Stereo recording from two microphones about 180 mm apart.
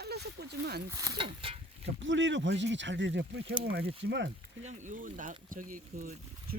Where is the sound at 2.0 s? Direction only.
90° right.